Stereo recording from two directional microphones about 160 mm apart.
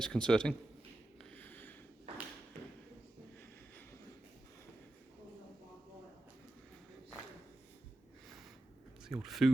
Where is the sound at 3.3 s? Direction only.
15° left (ahead or behind).